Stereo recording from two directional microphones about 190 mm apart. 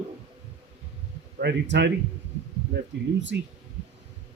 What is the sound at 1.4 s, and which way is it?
Speech, 65° right (ahead or behind).